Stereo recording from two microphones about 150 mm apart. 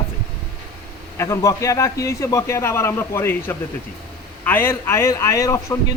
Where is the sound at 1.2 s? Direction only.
20° left (ahead or behind).